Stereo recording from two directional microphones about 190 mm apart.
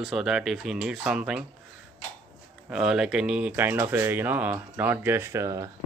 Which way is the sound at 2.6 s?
5° right (ahead or behind).